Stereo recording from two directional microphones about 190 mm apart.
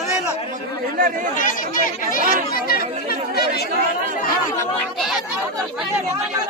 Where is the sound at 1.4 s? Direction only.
45° left (ahead or behind).